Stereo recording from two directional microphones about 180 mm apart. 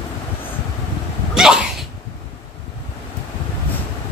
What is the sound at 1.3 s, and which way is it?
Sneeze, 5° right (ahead or behind).